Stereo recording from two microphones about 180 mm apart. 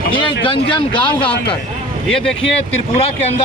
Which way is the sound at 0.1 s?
30° left (ahead or behind).